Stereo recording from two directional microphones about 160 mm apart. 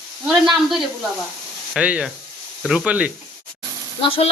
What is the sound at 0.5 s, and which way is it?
Speech, centre (ahead or behind).